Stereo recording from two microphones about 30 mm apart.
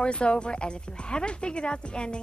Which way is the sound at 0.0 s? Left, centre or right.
Left.